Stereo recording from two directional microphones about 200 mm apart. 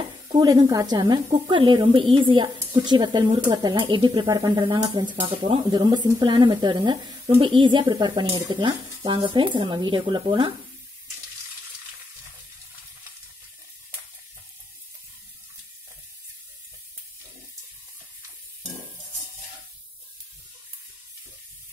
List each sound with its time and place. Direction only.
0.3 s a woman's voice: 20° right (ahead or behind)